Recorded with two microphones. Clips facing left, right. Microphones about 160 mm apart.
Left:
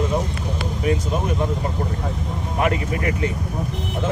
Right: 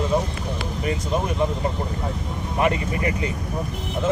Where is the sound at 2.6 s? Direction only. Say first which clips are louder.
Even; centre (ahead or behind).